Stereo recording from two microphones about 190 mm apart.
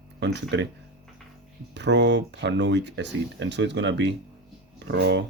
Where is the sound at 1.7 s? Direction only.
65° right (ahead or behind).